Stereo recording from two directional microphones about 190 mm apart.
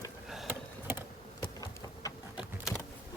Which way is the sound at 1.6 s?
20° left (ahead or behind).